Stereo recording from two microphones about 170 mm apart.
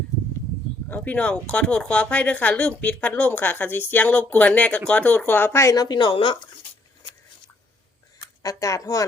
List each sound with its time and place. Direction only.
0.9 s speech: 10° left (ahead or behind); by 6.4 s 30° left (ahead or behind)
8.2 s speech: 20° left (ahead or behind)